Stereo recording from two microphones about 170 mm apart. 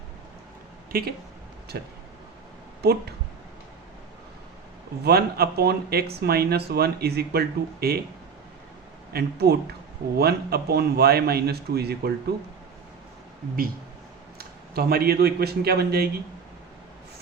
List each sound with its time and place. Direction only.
0.9 s a man's voice: 60° right (ahead or behind)
5.0 s a man's voice: 65° right (ahead or behind)
9.1 s a man's voice: 70° right (ahead or behind)
14.3 s speech: 65° right (ahead or behind)